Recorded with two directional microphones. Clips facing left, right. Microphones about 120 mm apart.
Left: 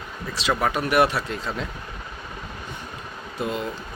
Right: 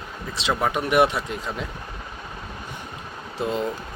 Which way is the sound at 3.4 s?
25° right (ahead or behind).